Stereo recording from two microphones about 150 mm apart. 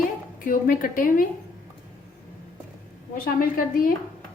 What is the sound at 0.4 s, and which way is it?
Speech, 70° left (ahead or behind).